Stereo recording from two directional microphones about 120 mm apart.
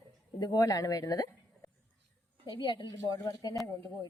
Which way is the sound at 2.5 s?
40° left (ahead or behind).